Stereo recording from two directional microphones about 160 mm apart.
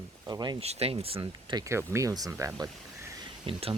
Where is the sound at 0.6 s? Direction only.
40° right (ahead or behind).